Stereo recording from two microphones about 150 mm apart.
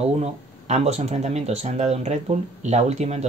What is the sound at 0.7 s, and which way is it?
Speech, 45° right (ahead or behind).